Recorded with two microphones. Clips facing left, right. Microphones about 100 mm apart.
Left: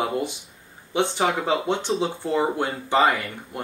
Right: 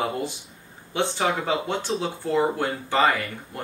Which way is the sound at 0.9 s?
20° left (ahead or behind).